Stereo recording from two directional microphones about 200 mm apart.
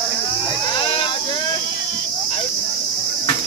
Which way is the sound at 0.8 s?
25° left (ahead or behind).